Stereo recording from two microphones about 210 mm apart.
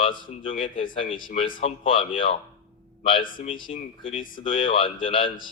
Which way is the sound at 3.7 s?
25° left (ahead or behind).